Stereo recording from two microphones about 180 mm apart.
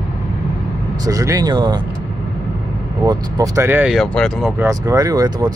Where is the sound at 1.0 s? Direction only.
20° right (ahead or behind).